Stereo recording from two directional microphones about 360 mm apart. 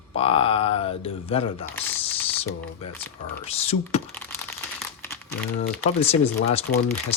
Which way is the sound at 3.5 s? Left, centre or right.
Centre.